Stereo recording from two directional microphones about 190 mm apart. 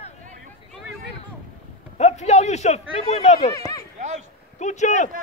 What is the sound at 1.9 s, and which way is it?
Speech, 35° left (ahead or behind).